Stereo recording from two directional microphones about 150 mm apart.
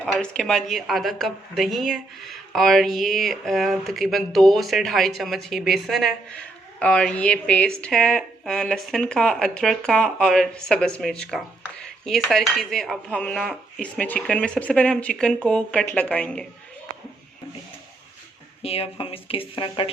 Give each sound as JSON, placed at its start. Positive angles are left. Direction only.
{"t": 0.0, "sound": "a woman's voice", "side_deg": 5}
{"t": 18.6, "sound": "speech", "side_deg": 40}